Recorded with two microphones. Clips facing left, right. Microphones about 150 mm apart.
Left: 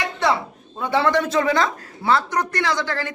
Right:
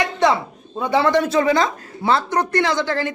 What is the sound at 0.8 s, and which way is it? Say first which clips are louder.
Speech: right 2 dB; 15° right (ahead or behind).